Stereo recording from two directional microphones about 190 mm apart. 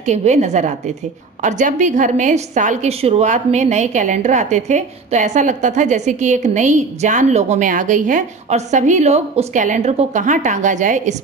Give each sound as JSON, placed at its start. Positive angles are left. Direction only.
{"t": 0.0, "sound": "a woman's voice", "side_deg": -35}